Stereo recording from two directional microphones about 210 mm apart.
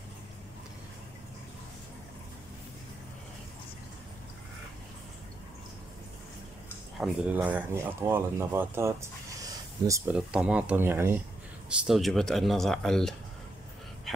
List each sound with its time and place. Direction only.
7.0 s speech: centre (ahead or behind)